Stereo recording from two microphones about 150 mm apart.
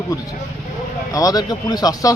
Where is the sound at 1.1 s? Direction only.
25° left (ahead or behind).